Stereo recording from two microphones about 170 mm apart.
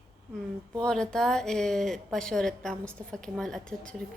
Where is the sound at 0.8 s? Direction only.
5° left (ahead or behind).